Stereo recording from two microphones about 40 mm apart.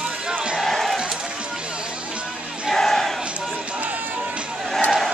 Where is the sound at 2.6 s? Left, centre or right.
Centre.